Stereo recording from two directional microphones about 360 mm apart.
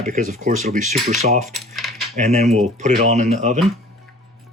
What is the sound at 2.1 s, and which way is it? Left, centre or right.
Speech, centre.